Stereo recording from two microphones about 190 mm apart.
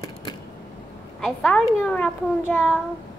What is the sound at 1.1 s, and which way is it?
A child's voice, 5° left (ahead or behind).